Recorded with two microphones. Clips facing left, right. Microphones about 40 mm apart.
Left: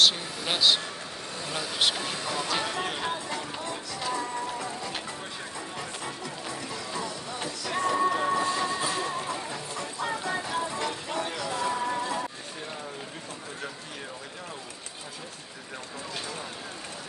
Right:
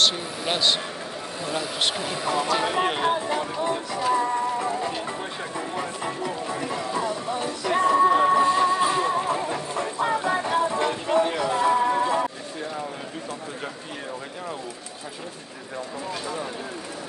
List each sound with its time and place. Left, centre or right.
0.0 s a man's voice: centre
2.6 s speech: right
5.8 s music: right